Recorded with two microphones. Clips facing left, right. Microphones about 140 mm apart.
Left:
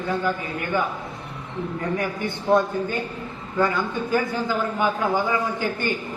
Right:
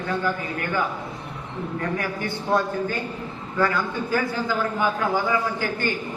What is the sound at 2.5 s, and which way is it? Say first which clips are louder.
Speech: left 3 dB; 20° left (ahead or behind).